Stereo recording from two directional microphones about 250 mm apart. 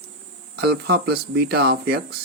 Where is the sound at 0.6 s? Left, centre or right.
Right.